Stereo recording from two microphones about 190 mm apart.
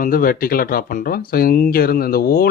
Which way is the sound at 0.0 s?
45° left (ahead or behind).